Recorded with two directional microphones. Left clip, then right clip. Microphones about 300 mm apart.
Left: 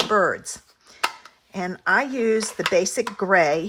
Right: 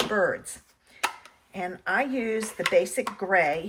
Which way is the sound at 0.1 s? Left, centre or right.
Centre.